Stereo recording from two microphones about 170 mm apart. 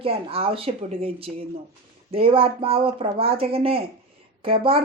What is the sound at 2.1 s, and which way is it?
A woman's voice, 35° right (ahead or behind).